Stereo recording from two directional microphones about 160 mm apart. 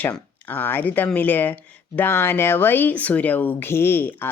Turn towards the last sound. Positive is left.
turn(degrees=15)  # may be behind; listen again after turning